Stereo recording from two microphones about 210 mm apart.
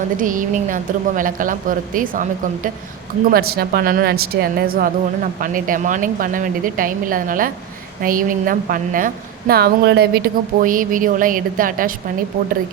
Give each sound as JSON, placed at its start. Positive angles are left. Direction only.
{"t": 0.2, "sound": "a woman's voice", "side_deg": -40}
{"t": 3.3, "sound": "a woman's voice", "side_deg": -45}